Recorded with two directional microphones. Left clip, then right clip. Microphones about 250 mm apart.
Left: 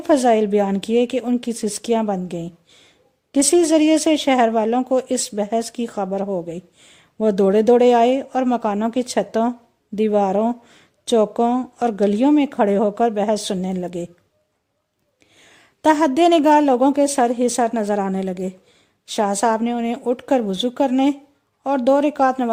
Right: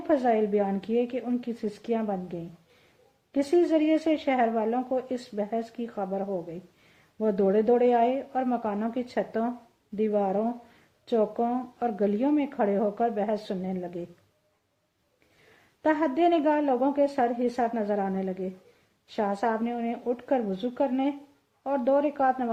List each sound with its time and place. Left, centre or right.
0.1 s speech: left
15.8 s speech: left